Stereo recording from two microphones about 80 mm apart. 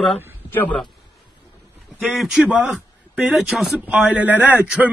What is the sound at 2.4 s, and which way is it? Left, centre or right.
Speech, centre.